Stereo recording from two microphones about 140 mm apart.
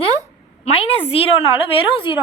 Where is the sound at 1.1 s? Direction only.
40° left (ahead or behind).